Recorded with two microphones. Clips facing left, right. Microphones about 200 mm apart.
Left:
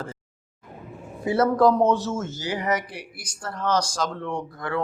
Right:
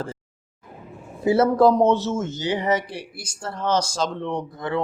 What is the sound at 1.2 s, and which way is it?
Speech, 25° right (ahead or behind).